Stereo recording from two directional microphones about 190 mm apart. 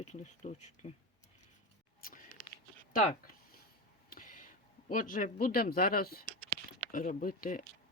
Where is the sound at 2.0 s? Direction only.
50° left (ahead or behind).